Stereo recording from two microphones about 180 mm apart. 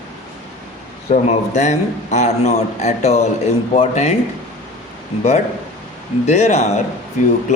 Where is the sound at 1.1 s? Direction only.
40° left (ahead or behind).